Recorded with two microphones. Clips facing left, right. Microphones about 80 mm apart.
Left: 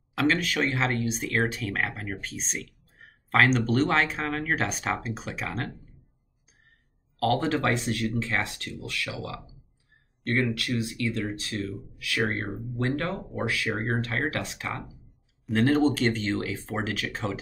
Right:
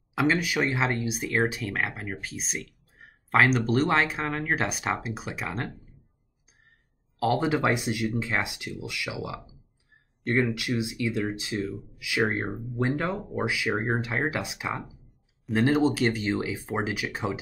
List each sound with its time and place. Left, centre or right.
0.1 s speech: centre
7.2 s speech: centre
10.5 s speech: centre
12.4 s speech: centre
12.8 s speech: centre